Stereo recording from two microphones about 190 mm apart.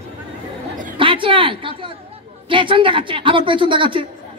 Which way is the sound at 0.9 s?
25° right (ahead or behind).